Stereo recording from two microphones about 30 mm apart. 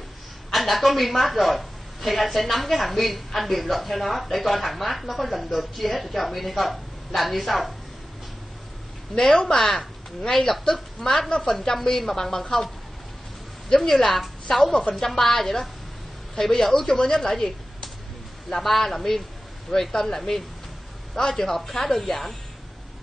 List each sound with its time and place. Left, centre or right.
0.5 s a woman's voice: centre
9.3 s a woman's voice: left
13.7 s a woman's voice: left
14.0 s a woman's voice: centre
18.6 s a woman's voice: centre